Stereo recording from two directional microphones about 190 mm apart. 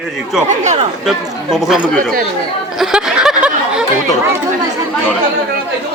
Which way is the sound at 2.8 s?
5° right (ahead or behind).